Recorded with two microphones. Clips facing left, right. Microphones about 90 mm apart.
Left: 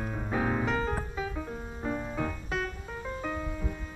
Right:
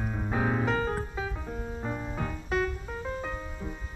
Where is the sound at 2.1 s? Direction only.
5° right (ahead or behind).